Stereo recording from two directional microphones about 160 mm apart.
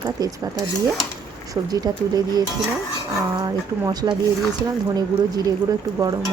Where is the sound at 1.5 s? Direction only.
25° right (ahead or behind).